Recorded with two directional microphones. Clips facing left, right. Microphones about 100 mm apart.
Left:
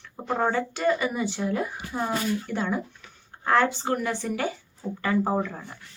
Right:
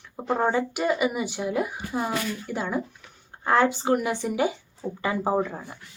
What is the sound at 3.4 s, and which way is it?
Speech, 20° right (ahead or behind).